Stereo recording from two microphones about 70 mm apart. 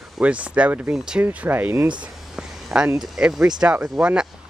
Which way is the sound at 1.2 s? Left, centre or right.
Right.